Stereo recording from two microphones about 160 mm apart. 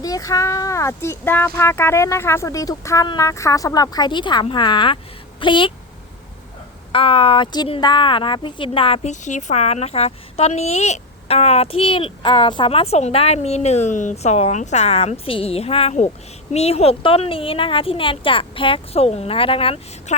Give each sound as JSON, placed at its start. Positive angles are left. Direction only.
{"t": 0.0, "sound": "speech", "side_deg": 20}
{"t": 6.9, "sound": "speech", "side_deg": 35}